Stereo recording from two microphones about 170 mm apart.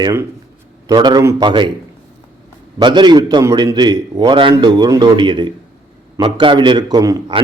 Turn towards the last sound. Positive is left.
turn(degrees=-20)  # may be behind; listen again after turning